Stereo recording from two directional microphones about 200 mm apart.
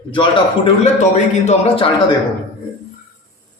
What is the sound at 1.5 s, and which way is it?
Speech, 25° left (ahead or behind).